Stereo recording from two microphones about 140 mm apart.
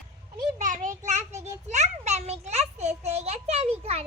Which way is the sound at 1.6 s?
55° right (ahead or behind).